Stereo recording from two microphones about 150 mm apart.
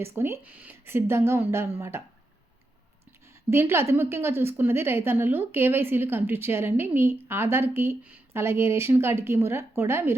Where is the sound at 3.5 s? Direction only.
15° right (ahead or behind).